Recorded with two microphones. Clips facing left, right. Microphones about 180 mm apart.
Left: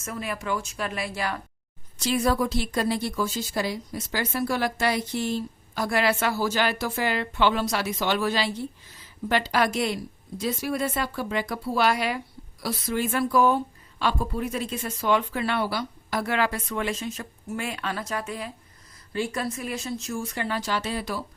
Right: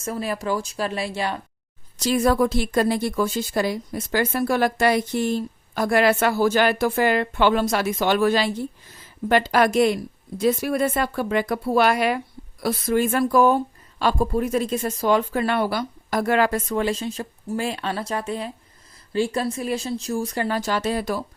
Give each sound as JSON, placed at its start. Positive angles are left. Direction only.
{"t": 0.0, "sound": "speech", "side_deg": -35}
{"t": 2.0, "sound": "a woman's voice", "side_deg": -45}